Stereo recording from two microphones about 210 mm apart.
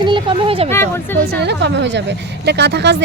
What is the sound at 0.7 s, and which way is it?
Speech, 10° left (ahead or behind).